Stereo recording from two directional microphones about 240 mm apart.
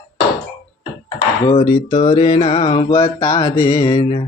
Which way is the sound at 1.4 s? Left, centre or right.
Centre.